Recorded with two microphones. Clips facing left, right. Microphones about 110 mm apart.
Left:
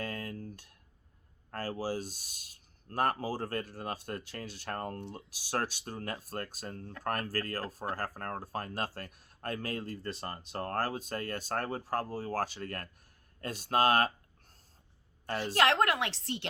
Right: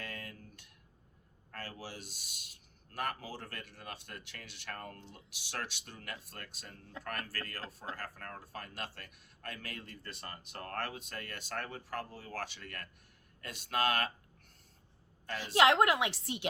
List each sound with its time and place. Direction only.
0.0 s a sound: 35° left (ahead or behind)
1.5 s speech: 40° left (ahead or behind)
15.5 s a woman's voice: 15° right (ahead or behind)